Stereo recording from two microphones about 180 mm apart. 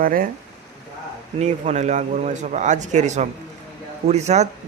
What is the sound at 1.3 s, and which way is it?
Speech, 40° right (ahead or behind).